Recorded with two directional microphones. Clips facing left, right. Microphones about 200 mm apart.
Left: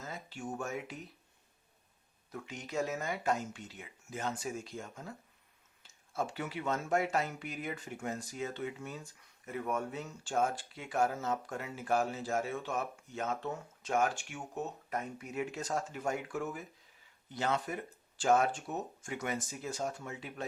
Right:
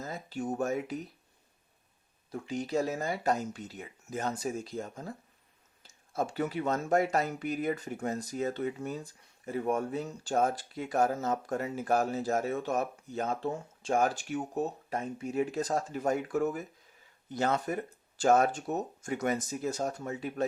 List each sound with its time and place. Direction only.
0.0 s speech: 40° right (ahead or behind)
2.3 s speech: 35° right (ahead or behind)
6.1 s speech: 40° right (ahead or behind)